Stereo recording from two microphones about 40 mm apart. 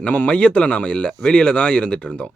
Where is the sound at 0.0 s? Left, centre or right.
Left.